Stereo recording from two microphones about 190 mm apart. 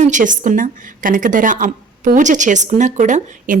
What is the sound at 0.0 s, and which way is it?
A woman's voice, 40° right (ahead or behind).